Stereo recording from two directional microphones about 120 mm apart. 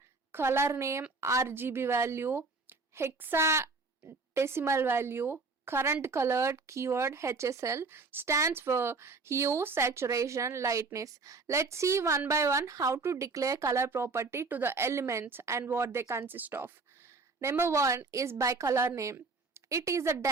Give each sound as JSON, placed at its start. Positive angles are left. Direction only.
{"t": 0.3, "sound": "speech", "side_deg": -20}